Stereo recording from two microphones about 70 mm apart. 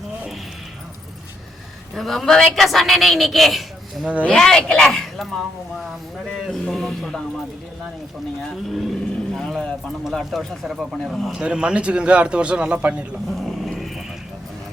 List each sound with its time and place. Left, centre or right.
2.0 s a woman's voice: centre
8.7 s a woman's voice: centre
11.3 s a man's voice: centre
13.2 s dog: centre